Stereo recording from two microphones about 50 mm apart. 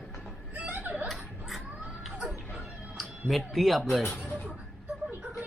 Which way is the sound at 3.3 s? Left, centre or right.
Centre.